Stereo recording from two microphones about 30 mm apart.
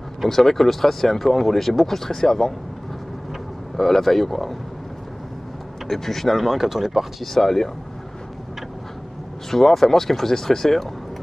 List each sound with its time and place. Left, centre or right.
0.3 s speech: centre
3.7 s speech: centre
5.9 s speech: centre
7.3 s speech: centre
9.5 s speech: centre